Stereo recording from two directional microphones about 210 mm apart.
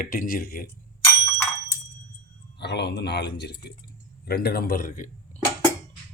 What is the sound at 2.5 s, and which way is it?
Speech, 55° left (ahead or behind).